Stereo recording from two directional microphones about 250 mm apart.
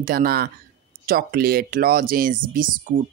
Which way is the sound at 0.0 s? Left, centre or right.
Right.